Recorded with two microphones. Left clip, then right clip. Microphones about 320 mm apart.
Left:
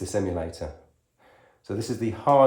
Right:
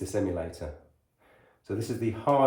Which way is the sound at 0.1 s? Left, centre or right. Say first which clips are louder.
Left 3 dB; left.